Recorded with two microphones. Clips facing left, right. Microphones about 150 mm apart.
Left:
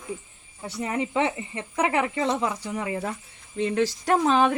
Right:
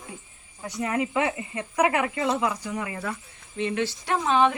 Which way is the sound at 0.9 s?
30° left (ahead or behind).